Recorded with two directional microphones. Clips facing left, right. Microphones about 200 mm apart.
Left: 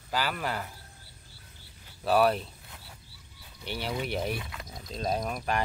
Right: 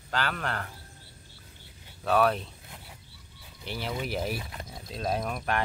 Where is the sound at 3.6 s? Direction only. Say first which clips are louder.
Even; centre (ahead or behind).